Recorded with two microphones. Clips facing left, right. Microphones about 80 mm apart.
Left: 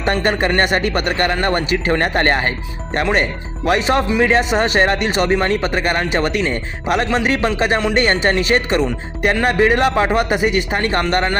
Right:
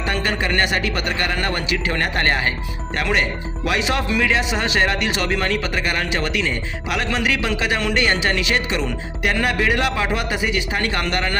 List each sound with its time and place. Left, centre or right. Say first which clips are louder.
0.0 s speech: left 5 dB; left
5.3 s speech: left 5 dB; left